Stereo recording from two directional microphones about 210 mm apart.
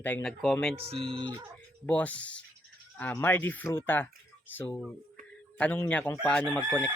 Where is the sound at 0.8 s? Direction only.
25° right (ahead or behind).